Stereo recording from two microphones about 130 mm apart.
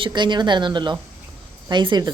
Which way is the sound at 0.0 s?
35° right (ahead or behind).